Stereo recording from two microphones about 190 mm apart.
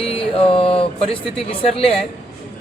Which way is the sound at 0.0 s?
30° left (ahead or behind).